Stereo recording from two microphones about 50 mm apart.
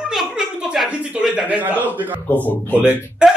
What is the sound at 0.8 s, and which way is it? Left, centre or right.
A man's voice, right.